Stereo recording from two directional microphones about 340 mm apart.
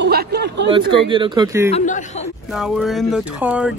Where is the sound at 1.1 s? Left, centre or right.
Centre.